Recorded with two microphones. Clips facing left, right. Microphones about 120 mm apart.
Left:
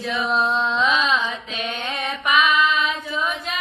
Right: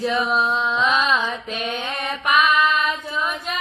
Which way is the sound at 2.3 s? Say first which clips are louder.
Right 1 dB; centre (ahead or behind).